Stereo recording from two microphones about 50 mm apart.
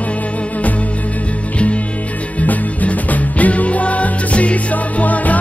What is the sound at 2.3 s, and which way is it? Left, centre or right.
Music, left.